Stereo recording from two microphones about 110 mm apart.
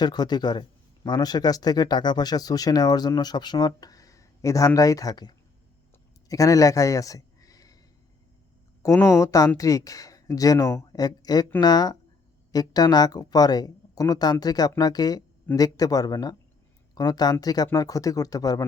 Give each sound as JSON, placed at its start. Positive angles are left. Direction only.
{"t": 0.0, "sound": "speech", "side_deg": 40}
{"t": 8.8, "sound": "speech", "side_deg": 25}